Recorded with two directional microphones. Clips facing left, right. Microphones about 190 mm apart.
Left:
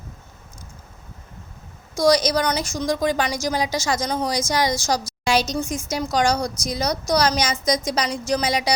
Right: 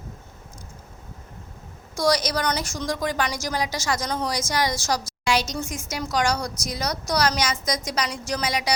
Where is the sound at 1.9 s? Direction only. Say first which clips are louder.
Left 5 dB; 15° left (ahead or behind).